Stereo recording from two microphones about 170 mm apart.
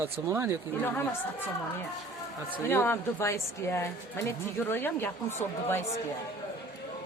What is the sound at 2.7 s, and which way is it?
A woman's voice, 15° left (ahead or behind).